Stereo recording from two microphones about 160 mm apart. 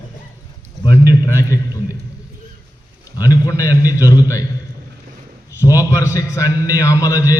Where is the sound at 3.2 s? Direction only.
20° left (ahead or behind).